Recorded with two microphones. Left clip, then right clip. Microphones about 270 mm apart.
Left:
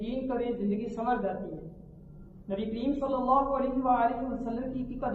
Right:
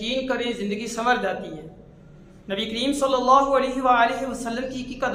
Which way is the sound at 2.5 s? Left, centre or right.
Right.